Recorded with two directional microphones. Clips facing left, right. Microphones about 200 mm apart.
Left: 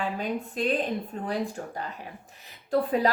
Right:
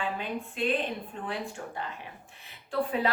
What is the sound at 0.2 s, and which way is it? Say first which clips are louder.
A woman's voice: left 3 dB; 40° left (ahead or behind).